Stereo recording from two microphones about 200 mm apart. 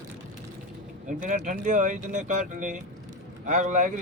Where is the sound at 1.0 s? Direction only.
40° right (ahead or behind).